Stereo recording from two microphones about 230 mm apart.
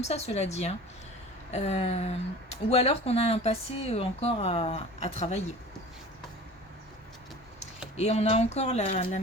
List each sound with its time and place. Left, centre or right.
0.0 s speech: left
7.9 s speech: left